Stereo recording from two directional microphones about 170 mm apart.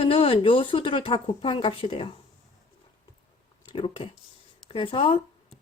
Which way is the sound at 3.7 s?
30° left (ahead or behind).